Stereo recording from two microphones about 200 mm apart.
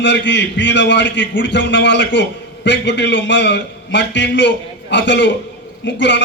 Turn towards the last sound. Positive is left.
turn(degrees=65)  # may be behind; listen again after turning